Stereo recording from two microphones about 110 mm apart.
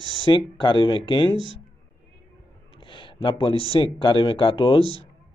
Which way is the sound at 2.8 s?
50° left (ahead or behind).